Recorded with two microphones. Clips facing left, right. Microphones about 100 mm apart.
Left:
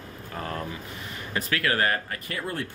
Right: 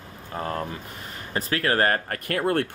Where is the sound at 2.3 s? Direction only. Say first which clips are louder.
Right 10 dB; 60° right (ahead or behind).